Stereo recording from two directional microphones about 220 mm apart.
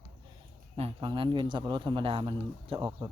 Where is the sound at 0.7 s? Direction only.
25° right (ahead or behind).